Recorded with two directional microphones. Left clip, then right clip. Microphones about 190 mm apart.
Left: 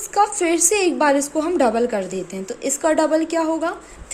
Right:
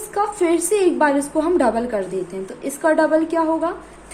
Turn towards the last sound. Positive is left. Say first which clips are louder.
# right 1 dB
turn(degrees=25)  # may be behind; listen again after turning